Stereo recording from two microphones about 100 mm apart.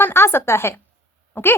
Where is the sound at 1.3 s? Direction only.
20° left (ahead or behind).